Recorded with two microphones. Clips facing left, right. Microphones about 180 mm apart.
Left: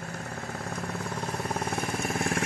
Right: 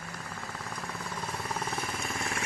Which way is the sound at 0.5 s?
65° left (ahead or behind).